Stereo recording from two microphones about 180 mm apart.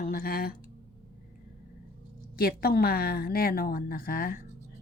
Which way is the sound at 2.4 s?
55° left (ahead or behind).